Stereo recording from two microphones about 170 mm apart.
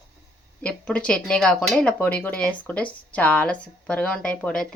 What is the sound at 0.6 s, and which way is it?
Speech, 5° left (ahead or behind).